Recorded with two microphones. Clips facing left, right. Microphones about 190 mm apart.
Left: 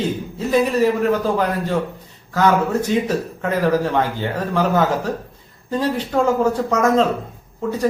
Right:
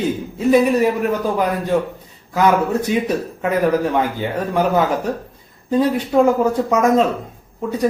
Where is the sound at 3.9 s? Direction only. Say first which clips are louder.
Right 1 dB; 15° right (ahead or behind).